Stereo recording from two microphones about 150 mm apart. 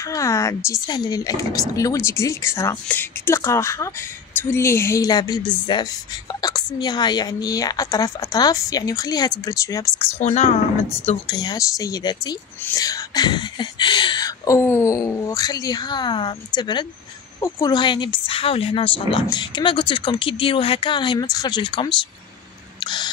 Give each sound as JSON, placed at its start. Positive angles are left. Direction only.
{"t": 0.1, "sound": "a woman's voice", "side_deg": 20}
{"t": 9.9, "sound": "speech", "side_deg": 50}
{"t": 11.1, "sound": "speech", "side_deg": 30}
{"t": 22.8, "sound": "a sound", "side_deg": 30}